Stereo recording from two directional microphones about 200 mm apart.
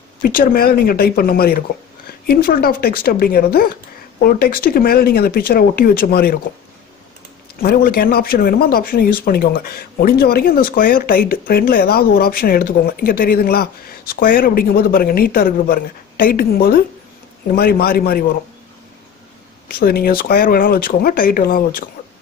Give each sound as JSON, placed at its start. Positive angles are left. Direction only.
{"t": 0.2, "sound": "speech", "side_deg": 45}
{"t": 7.6, "sound": "speech", "side_deg": 50}
{"t": 19.7, "sound": "speech", "side_deg": 50}